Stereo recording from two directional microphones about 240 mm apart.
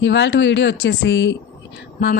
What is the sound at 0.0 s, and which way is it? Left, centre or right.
Speech, left.